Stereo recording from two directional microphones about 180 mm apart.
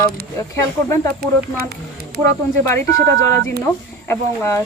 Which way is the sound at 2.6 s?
20° left (ahead or behind).